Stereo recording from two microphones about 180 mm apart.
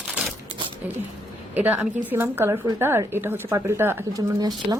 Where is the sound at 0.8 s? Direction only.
10° right (ahead or behind).